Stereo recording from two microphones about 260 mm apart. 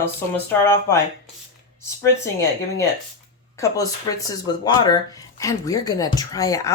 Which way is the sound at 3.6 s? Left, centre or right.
Centre.